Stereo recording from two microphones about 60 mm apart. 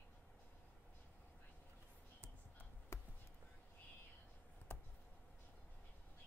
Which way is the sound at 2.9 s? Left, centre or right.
Left.